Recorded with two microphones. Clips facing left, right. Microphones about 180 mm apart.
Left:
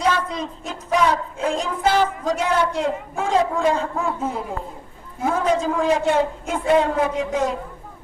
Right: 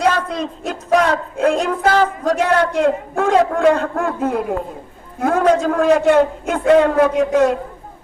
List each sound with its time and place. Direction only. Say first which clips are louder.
0.0 s a man's voice: right 4 dB; 70° right (ahead or behind)